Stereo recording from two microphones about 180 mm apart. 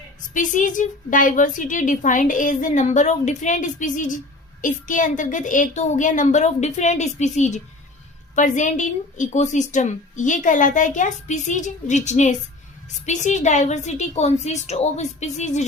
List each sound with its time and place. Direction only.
0.3 s a woman's voice: 45° left (ahead or behind)